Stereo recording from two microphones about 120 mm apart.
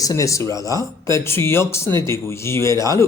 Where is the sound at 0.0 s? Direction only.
25° left (ahead or behind).